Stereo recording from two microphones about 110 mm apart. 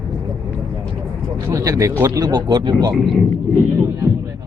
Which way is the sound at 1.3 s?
30° right (ahead or behind).